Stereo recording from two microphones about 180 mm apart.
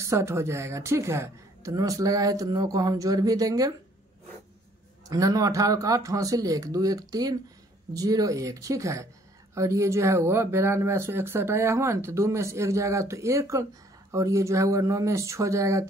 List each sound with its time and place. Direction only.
0.0 s speech: 15° right (ahead or behind)
5.0 s speech: 20° right (ahead or behind)